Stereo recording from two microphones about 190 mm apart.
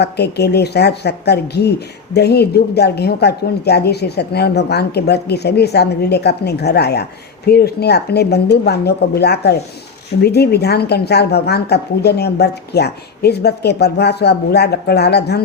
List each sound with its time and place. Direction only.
0.0 s a woman's voice: 60° left (ahead or behind)